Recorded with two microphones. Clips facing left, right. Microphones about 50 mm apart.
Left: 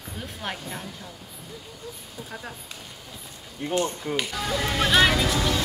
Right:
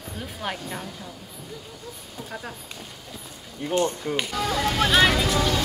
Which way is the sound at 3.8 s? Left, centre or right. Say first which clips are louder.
Right 3 dB; centre.